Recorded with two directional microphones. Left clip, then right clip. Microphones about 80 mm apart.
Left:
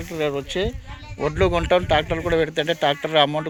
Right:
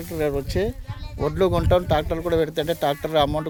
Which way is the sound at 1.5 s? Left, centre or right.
Centre.